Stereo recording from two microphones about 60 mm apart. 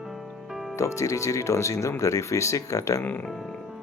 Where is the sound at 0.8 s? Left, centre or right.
Left.